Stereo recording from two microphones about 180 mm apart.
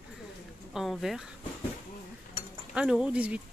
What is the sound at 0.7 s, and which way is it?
Speech, centre (ahead or behind).